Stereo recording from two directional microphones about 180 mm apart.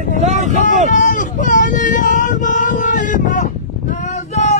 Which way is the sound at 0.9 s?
45° left (ahead or behind).